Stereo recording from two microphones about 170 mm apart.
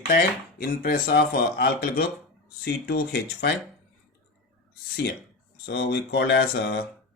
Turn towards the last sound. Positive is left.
turn(degrees=70)  # may be behind; listen again after turning